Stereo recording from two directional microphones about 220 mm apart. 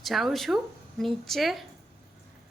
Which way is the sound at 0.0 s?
Centre (ahead or behind).